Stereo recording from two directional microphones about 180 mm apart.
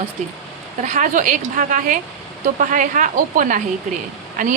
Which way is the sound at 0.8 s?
45° right (ahead or behind).